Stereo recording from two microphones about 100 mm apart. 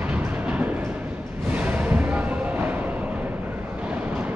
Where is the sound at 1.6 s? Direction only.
15° right (ahead or behind).